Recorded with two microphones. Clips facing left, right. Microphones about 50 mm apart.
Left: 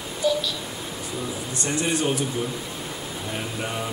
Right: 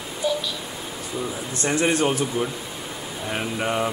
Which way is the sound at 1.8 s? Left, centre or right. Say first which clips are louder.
Right 3 dB; right.